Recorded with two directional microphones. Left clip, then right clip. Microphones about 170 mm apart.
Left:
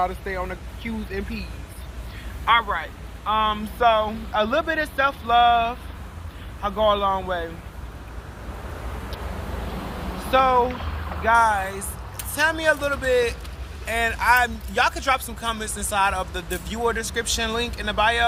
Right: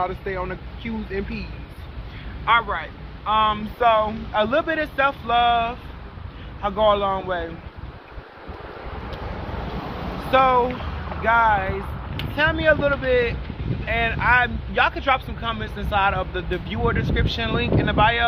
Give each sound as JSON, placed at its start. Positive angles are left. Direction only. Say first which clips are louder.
{"t": 0.0, "sound": "speech", "louder": "even", "side_deg": 15}
{"t": 2.4, "sound": "speech", "louder": "even", "side_deg": 20}
{"t": 10.3, "sound": "speech", "louder": "right 1 dB", "side_deg": 15}